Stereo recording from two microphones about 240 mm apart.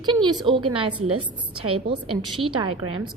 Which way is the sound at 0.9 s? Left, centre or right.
Right.